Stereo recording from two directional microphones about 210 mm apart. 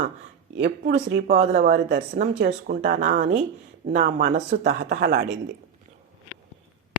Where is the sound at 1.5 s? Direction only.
50° right (ahead or behind).